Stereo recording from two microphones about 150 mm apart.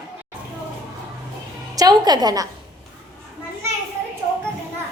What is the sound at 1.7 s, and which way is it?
Speech, 25° right (ahead or behind).